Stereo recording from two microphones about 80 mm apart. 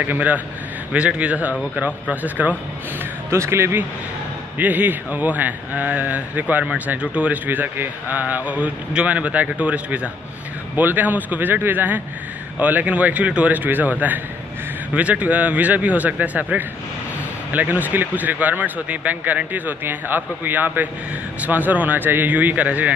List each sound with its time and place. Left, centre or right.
0.0 s a man's voice: right
3.3 s speech: right
4.6 s a man's voice: right